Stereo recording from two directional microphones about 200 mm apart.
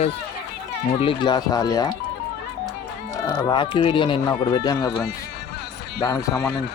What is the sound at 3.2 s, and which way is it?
Speech, 15° left (ahead or behind).